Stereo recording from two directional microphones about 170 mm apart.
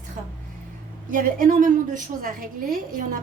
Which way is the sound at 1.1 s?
55° right (ahead or behind).